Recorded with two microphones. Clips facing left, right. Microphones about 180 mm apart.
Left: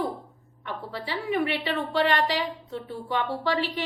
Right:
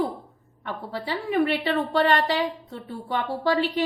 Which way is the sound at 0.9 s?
45° right (ahead or behind).